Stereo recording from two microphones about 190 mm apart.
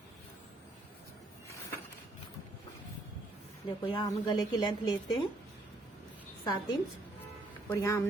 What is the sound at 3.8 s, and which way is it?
A woman's voice, 25° left (ahead or behind).